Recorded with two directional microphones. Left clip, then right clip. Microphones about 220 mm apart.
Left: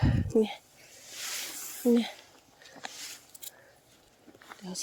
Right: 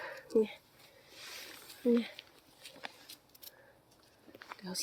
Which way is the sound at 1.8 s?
30° left (ahead or behind).